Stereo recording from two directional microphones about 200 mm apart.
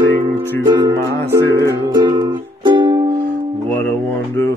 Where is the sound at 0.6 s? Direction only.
20° right (ahead or behind).